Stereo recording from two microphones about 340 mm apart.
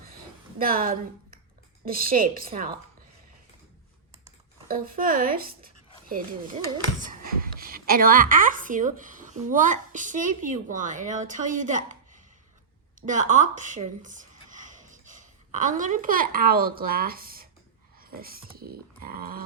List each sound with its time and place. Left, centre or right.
0.6 s a woman's voice: right
4.9 s a woman's voice: right
13.0 s speech: right